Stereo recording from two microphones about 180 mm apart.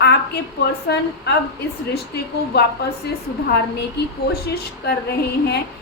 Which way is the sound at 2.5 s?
65° left (ahead or behind).